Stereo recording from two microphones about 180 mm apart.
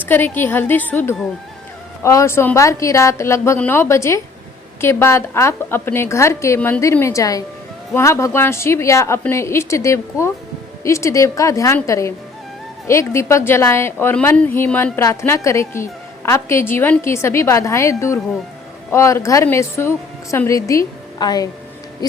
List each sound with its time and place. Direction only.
0.1 s a woman's voice: 10° left (ahead or behind)